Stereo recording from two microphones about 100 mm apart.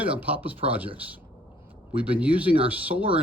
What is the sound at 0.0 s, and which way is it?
Speech, 15° right (ahead or behind).